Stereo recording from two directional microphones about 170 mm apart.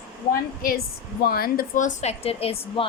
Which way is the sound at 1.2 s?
60° left (ahead or behind).